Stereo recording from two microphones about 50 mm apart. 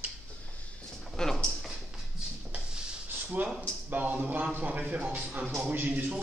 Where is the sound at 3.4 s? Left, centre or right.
Right.